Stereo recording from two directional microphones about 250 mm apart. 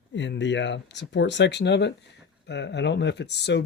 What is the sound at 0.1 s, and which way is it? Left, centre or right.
Speech, left.